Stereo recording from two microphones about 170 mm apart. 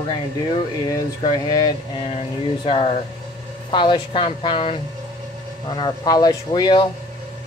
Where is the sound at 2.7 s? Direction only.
35° left (ahead or behind).